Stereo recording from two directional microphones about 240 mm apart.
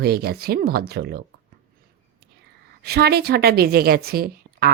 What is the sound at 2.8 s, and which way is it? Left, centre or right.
A woman's voice, right.